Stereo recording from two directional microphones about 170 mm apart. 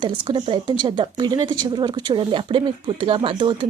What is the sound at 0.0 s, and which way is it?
A woman's voice, 30° right (ahead or behind).